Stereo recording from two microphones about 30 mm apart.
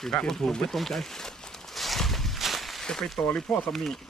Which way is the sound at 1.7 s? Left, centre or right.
Centre.